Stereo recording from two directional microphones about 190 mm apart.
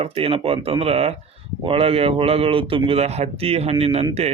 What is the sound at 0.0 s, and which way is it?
Speech, 30° right (ahead or behind).